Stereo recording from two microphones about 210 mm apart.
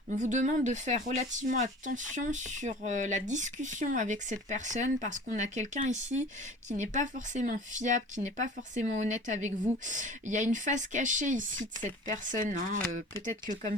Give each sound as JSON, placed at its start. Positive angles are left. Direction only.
{"t": 0.2, "sound": "speech", "side_deg": -35}